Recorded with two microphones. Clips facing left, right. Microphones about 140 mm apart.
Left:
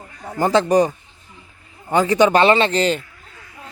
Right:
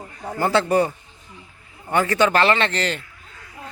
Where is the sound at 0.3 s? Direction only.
15° left (ahead or behind).